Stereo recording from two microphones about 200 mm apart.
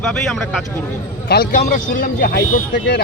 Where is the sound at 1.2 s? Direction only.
50° left (ahead or behind).